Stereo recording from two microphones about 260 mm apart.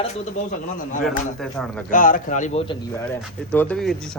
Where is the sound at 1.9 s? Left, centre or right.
Left.